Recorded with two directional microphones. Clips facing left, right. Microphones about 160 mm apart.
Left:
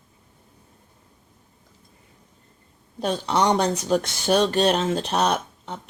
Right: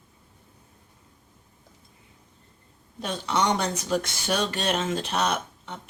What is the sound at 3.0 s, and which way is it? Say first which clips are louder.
Speech: left 4 dB; 35° left (ahead or behind).